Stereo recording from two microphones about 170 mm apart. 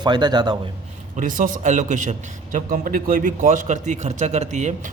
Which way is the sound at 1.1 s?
50° right (ahead or behind).